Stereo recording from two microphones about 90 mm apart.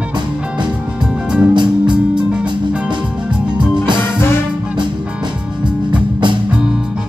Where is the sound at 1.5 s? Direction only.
60° right (ahead or behind).